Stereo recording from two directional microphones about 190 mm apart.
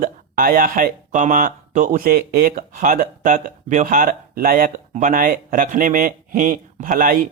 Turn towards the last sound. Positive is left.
turn(degrees=-45)  # may be behind; listen again after turning